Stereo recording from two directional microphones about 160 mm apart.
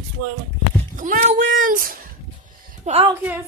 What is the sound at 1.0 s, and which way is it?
Speech, 55° right (ahead or behind).